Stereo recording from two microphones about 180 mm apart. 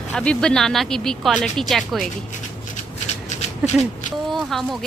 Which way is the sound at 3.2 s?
40° left (ahead or behind).